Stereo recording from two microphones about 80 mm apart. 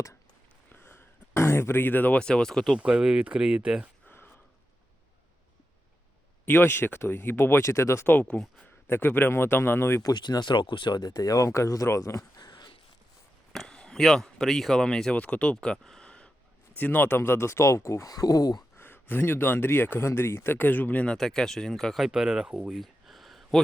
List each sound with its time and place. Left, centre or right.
0.7 s a sound: left
2.1 s speech: centre
2.7 s speech: centre
4.0 s a sound: left
6.4 s speech: left
8.0 s speech: left
10.0 s speech: left
12.4 s a sound: left
13.5 s speech: centre
16.7 s speech: left
18.1 s speech: left
18.8 s speech: left; by 22.7 s centre
22.7 s a sound: centre